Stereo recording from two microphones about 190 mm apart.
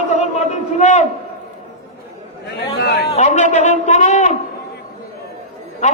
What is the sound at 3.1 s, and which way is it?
A man's voice, 40° left (ahead or behind).